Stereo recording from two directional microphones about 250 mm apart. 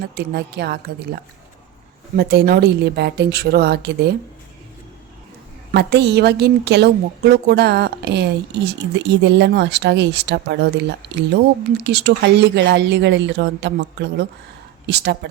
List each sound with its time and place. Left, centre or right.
0.1 s a woman's voice: right
2.1 s a woman's voice: right
5.7 s a woman's voice: right